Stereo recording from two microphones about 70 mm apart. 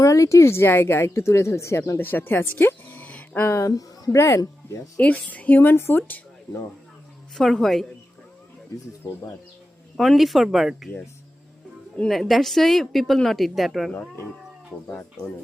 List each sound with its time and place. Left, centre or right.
0.0 s speech: left
2.0 s speech: left
3.3 s speech: left
3.7 s speech: left
4.9 s a woman's voice: left
7.3 s speech: centre
10.0 s speech: centre
12.0 s speech: centre